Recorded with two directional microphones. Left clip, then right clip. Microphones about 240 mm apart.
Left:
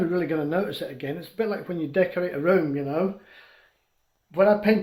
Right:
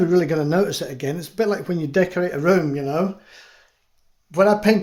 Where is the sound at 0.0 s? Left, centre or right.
Right.